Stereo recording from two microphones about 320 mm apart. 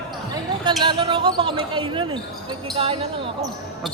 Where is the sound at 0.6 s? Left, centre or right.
Centre.